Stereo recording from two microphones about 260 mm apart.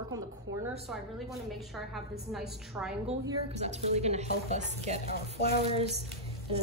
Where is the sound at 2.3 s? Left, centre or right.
Centre.